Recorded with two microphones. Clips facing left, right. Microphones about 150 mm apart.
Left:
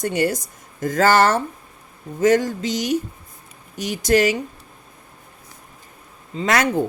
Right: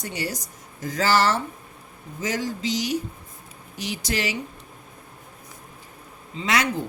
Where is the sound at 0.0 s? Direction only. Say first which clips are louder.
Left 10 dB; 55° left (ahead or behind).